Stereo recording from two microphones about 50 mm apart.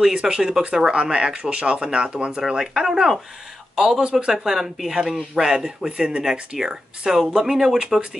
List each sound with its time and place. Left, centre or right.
0.0 s speech: centre
2.4 s speech: centre
4.5 s speech: centre